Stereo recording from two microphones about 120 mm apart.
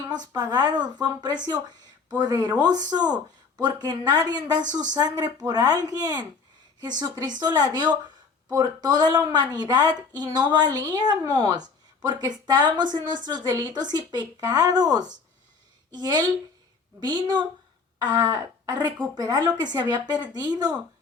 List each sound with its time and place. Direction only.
0.1 s speech: 35° right (ahead or behind)